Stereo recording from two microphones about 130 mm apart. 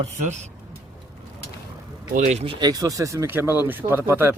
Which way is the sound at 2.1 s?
65° right (ahead or behind).